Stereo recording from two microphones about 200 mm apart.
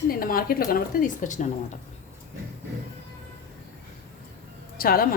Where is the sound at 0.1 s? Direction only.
45° left (ahead or behind).